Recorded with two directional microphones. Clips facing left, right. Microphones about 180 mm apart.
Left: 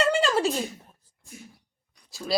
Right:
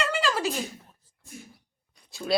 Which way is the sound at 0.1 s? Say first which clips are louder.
Left 4 dB; 25° left (ahead or behind).